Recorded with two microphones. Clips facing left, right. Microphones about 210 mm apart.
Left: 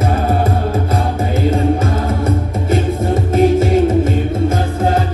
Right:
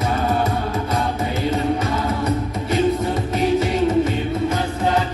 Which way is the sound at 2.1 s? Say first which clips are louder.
Left 3 dB; 50° left (ahead or behind).